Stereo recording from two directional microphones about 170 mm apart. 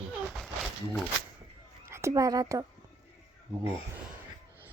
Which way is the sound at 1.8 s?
15° right (ahead or behind).